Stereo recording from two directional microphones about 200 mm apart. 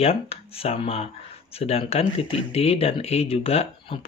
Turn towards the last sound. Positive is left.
turn(degrees=30)  # may be behind; listen again after turning